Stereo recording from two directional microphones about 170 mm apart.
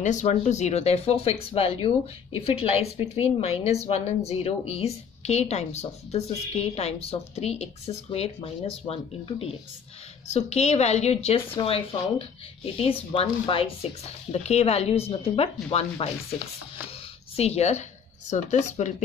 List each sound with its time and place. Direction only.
0.0 s speech: 45° left (ahead or behind)
17.4 s speech: 40° left (ahead or behind)